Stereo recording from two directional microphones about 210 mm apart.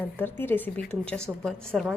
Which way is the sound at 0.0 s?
10° left (ahead or behind).